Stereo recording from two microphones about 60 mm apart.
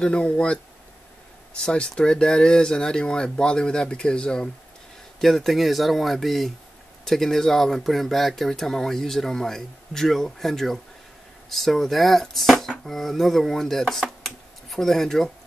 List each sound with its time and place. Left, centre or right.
0.0 s speech: centre
5.2 s speech: centre